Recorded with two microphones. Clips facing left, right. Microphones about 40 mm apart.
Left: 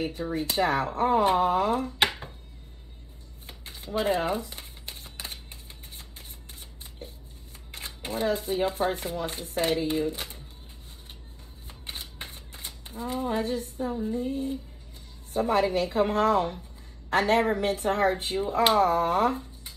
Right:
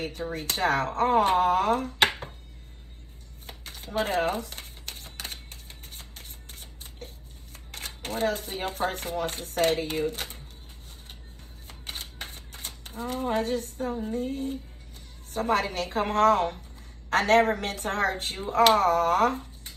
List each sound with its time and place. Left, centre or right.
0.3 s speech: right
3.4 s crumpling: right
8.1 s speech: right
12.6 s speech: right